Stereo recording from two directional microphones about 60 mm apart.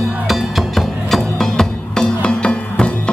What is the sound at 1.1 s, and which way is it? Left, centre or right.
Music, centre.